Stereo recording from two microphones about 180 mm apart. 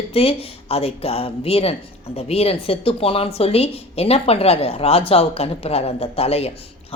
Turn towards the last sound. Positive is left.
turn(degrees=35)  # may be behind; listen again after turning